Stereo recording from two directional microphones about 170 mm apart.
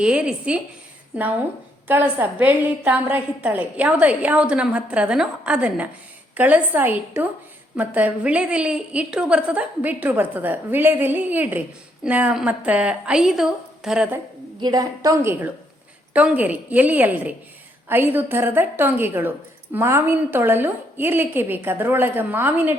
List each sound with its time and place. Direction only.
0.0 s a woman's voice: 5° right (ahead or behind)
1.9 s a woman's voice: 10° right (ahead or behind)
14.6 s a woman's voice: 20° right (ahead or behind)